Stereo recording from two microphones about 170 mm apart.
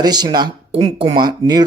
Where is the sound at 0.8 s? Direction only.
35° right (ahead or behind).